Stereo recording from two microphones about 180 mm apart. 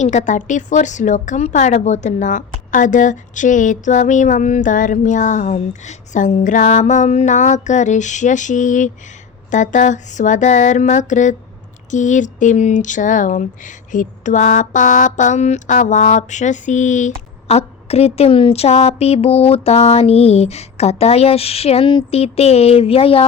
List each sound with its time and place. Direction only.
0.0 s speech: 40° left (ahead or behind)